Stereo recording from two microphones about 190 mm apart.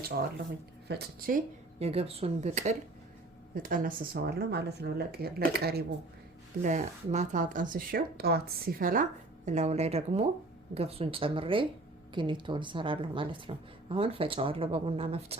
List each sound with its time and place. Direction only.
0.9 s speech: 55° right (ahead or behind)
1.8 s speech: 30° right (ahead or behind); by 5.8 s 55° right (ahead or behind)
6.6 s speech: 40° right (ahead or behind)
9.5 s a woman's voice: 35° right (ahead or behind)